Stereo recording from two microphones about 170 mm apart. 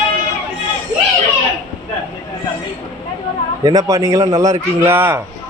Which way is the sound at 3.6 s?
20° right (ahead or behind).